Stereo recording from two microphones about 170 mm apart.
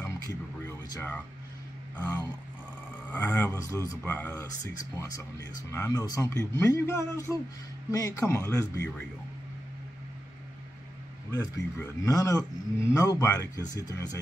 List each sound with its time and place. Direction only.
0.7 s a sound: 10° left (ahead or behind)
2.0 s speech: 10° left (ahead or behind)
5.7 s speech: 15° left (ahead or behind)
11.3 s speech: 15° left (ahead or behind)